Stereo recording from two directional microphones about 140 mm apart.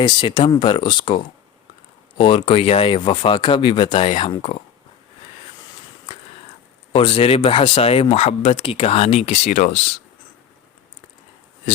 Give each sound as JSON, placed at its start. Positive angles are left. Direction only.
{"t": 0.0, "sound": "speech", "side_deg": 35}
{"t": 6.9, "sound": "speech", "side_deg": 40}